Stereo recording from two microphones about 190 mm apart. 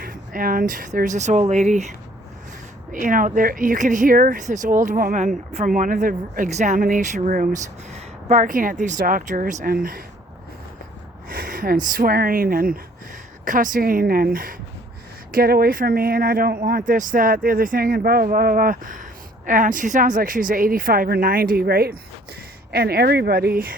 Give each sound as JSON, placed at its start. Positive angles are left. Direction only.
{"t": 0.0, "sound": "speech", "side_deg": -50}
{"t": 2.9, "sound": "speech", "side_deg": -45}
{"t": 7.9, "sound": "a sound", "side_deg": -40}
{"t": 8.8, "sound": "speech", "side_deg": -45}
{"t": 11.3, "sound": "speech", "side_deg": -50}